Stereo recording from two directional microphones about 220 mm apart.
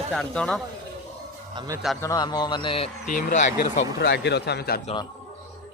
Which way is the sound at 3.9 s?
50° left (ahead or behind).